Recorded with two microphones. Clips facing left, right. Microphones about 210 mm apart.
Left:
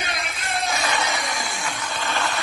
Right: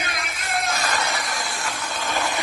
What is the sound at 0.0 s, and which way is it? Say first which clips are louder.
Music: left 1 dB; 30° left (ahead or behind).